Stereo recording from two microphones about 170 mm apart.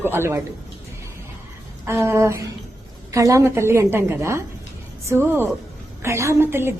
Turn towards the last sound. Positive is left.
turn(degrees=-15)  # may be behind; listen again after turning